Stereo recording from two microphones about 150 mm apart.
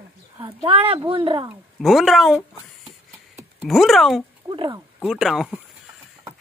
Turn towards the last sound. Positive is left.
turn(degrees=0)  # may be behind; listen again after turning